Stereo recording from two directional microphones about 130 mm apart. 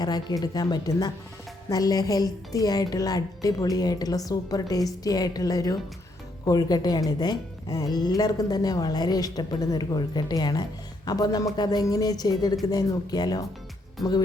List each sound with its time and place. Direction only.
0.0 s a woman's voice: 30° left (ahead or behind)